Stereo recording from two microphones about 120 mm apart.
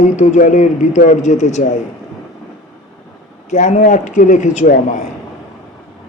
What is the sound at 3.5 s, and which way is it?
A man's voice, 85° left.